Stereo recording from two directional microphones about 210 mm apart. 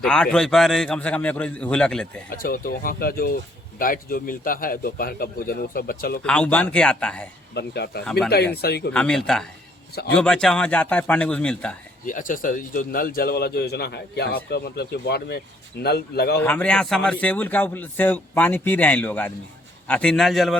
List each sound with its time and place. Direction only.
0.0 s a man's voice: 5° left (ahead or behind)
2.4 s speech: 45° left (ahead or behind)
6.2 s a man's voice: 5° left (ahead or behind)
7.5 s speech: 50° left (ahead or behind)
8.9 s a man's voice: 5° left (ahead or behind)
12.0 s speech: 40° left (ahead or behind)
16.4 s a man's voice: 10° left (ahead or behind)